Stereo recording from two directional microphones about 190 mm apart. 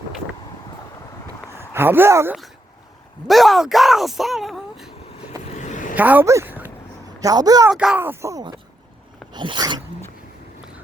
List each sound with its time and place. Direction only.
1.5 s speech: 10° right (ahead or behind)
3.2 s speech: centre (ahead or behind)
5.4 s vehicle: 40° left (ahead or behind)
6.0 s a woman's voice: 10° right (ahead or behind)
7.7 s a woman's voice: 5° right (ahead or behind); by 9.8 s 25° right (ahead or behind)